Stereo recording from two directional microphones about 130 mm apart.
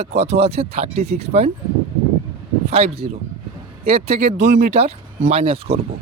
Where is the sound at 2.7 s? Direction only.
50° right (ahead or behind).